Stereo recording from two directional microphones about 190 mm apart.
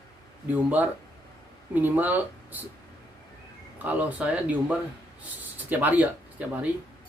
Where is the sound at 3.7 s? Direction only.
10° right (ahead or behind).